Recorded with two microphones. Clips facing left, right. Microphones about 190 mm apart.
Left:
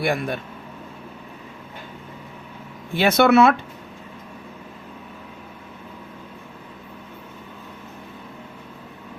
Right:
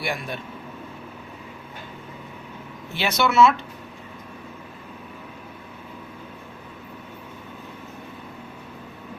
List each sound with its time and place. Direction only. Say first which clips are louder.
0.0 s speech: left 6 dB; 55° left (ahead or behind)
2.9 s speech: left 7 dB; 55° left (ahead or behind)